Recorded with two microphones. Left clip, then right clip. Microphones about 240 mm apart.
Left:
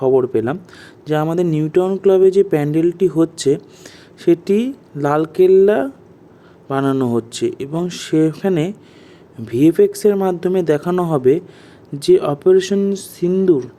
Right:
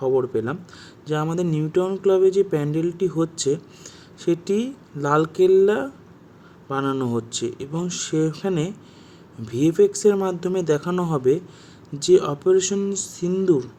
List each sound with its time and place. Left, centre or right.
0.0 s speech: centre